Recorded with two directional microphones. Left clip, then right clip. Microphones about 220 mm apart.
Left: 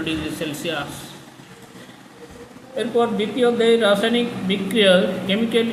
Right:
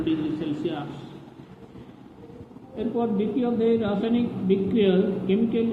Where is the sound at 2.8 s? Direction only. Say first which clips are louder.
Left 6 dB; 60° left (ahead or behind).